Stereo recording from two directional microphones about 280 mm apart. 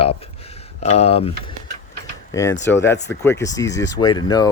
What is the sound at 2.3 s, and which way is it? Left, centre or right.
Speech, centre.